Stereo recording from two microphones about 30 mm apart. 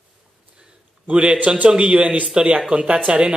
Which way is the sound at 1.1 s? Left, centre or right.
Right.